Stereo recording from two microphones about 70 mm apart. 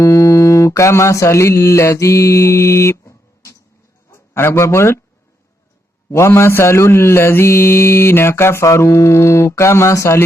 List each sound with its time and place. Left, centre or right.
0.0 s mantra: left
3.0 s a sound: left
4.1 s a man's voice: left
6.1 s mantra: left